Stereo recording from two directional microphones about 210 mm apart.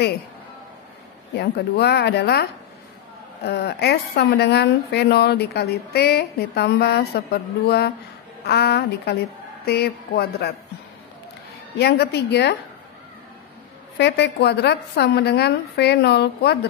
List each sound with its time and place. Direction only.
1.3 s a woman's voice: 50° left (ahead or behind)
3.4 s a woman's voice: 50° left (ahead or behind)
11.8 s a woman's voice: 50° left (ahead or behind)
13.9 s a woman's voice: 55° left (ahead or behind)